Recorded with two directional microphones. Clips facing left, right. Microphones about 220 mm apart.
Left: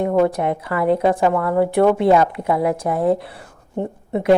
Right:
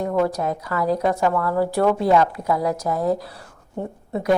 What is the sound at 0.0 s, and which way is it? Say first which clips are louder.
A woman's voice: left 4 dB; 25° left (ahead or behind).